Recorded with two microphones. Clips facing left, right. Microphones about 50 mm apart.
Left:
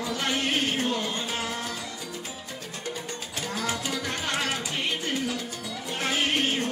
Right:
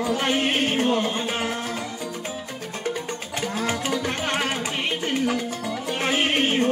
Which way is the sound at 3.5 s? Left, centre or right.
Right.